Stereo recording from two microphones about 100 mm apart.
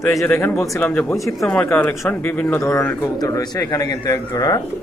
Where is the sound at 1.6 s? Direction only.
25° left (ahead or behind).